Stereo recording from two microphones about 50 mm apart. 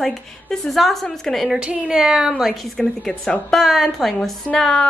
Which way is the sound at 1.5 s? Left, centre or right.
Right.